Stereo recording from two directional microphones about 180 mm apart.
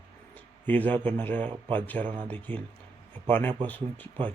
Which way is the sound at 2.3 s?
10° left (ahead or behind).